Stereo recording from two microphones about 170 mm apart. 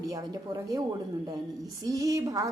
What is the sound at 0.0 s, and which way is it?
A woman's voice, 20° right (ahead or behind).